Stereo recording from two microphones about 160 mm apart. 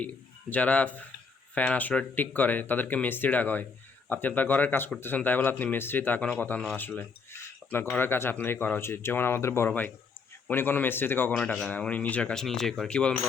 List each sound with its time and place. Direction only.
0.0 s a man's voice: 10° left (ahead or behind)